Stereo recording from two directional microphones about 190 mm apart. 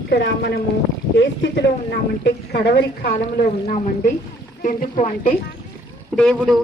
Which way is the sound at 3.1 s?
40° left (ahead or behind).